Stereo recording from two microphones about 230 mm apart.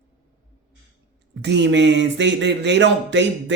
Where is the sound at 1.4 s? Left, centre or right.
Right.